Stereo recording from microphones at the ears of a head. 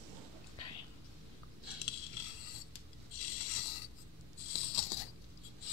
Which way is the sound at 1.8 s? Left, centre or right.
Left.